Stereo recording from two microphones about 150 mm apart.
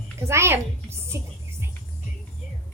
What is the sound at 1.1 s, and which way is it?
Music, 20° right (ahead or behind).